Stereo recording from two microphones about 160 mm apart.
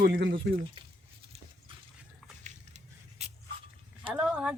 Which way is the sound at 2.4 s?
45° right (ahead or behind).